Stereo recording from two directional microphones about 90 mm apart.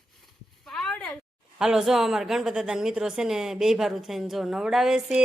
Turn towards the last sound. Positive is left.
turn(degrees=-10)  # may be behind; listen again after turning